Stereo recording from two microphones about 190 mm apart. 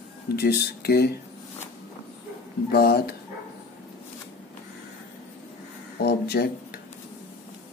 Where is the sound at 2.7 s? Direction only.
55° left (ahead or behind).